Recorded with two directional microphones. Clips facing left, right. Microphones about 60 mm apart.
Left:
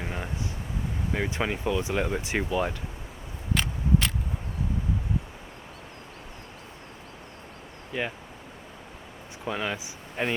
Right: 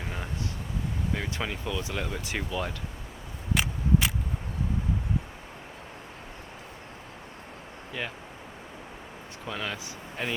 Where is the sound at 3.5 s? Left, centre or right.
Centre.